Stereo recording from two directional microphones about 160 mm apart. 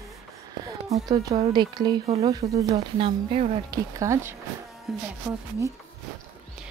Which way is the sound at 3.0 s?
35° right (ahead or behind).